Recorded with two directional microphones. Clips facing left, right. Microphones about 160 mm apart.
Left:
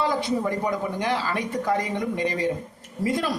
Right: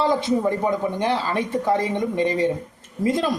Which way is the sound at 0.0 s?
20° right (ahead or behind).